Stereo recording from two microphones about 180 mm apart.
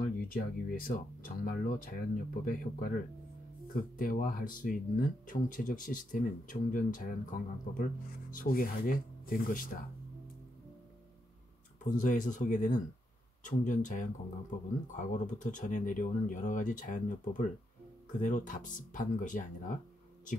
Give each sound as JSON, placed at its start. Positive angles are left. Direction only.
{"t": 0.0, "sound": "speech", "side_deg": 50}
{"t": 3.9, "sound": "speech", "side_deg": 50}
{"t": 11.8, "sound": "speech", "side_deg": 45}